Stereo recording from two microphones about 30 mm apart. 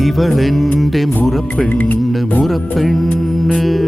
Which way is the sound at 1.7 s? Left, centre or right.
Left.